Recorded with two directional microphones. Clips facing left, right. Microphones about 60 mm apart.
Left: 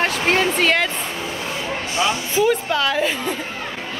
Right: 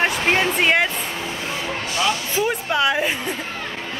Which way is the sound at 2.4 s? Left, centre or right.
Centre.